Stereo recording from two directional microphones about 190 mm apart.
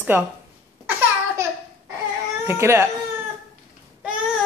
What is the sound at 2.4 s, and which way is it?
Speech, 15° right (ahead or behind).